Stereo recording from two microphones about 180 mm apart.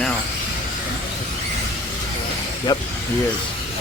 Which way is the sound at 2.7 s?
25° left (ahead or behind).